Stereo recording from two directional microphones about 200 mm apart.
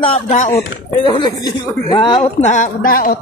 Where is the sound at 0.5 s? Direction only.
20° left (ahead or behind).